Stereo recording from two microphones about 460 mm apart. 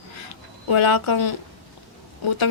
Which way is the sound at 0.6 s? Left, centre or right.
Left.